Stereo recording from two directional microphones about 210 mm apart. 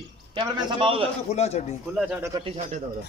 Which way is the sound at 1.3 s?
30° left (ahead or behind).